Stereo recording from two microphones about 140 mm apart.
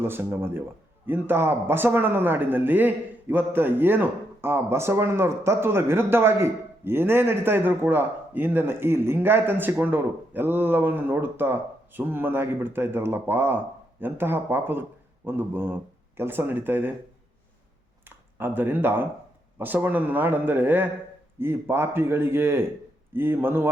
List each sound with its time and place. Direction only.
0.0 s a man's voice: 15° right (ahead or behind)
18.3 s a man's voice: 15° right (ahead or behind)